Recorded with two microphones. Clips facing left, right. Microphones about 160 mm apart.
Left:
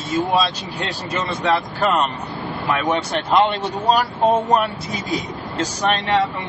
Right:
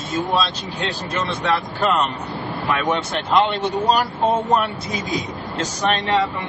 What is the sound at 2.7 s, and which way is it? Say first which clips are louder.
Speech: left 1 dB; centre (ahead or behind).